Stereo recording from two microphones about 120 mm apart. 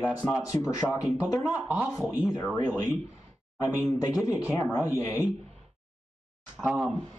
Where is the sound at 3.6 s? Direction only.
30° left (ahead or behind).